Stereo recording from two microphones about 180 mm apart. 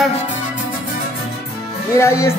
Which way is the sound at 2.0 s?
15° left (ahead or behind).